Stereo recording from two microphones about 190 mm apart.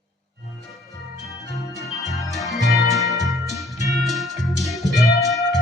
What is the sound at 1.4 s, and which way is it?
Music, 15° left (ahead or behind).